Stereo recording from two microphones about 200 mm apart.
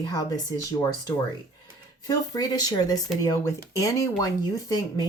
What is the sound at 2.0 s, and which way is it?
Speech, 20° left (ahead or behind).